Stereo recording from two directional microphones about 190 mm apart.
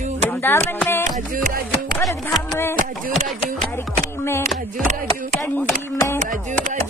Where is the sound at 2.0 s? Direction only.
Centre (ahead or behind).